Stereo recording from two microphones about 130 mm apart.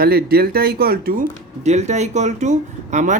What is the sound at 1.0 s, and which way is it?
Speech, 90° right.